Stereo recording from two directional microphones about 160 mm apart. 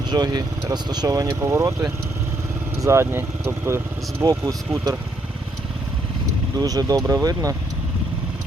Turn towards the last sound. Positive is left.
turn(degrees=-20)  # may be behind; listen again after turning